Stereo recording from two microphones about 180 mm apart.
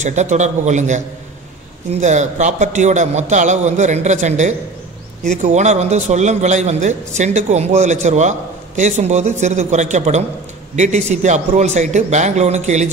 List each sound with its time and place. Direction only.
0.0 s a man's voice: 40° right (ahead or behind)